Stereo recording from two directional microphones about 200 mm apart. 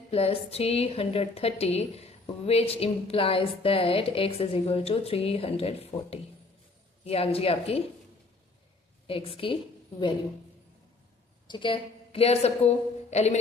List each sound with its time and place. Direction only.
0.1 s speech: 30° left (ahead or behind)
9.0 s speech: 25° left (ahead or behind)
11.4 s a woman's voice: 25° left (ahead or behind)